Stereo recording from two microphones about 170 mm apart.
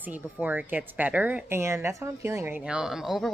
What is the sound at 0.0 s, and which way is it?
A woman's voice, 10° right (ahead or behind).